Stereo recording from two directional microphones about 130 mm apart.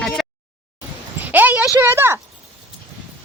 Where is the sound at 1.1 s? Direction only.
15° right (ahead or behind).